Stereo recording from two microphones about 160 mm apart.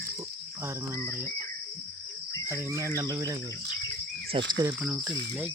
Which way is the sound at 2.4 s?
15° right (ahead or behind).